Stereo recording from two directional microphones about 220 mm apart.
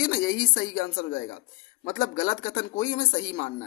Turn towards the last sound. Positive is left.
turn(degrees=35)  # may be behind; listen again after turning